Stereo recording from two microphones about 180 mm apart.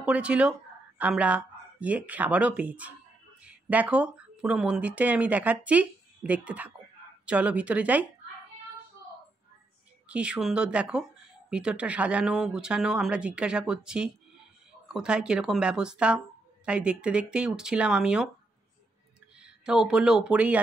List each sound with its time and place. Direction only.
0.0 s a woman's voice: 5° right (ahead or behind)
10.0 s speech: 5° right (ahead or behind)
19.4 s speech: 5° right (ahead or behind)